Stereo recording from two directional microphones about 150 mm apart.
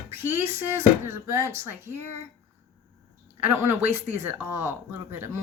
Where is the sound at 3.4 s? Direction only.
15° right (ahead or behind).